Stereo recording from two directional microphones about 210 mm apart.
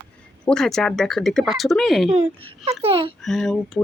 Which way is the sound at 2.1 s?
25° right (ahead or behind).